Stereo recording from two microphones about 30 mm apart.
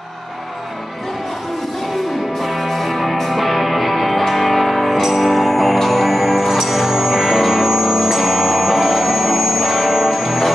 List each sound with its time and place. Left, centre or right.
2.4 s music: centre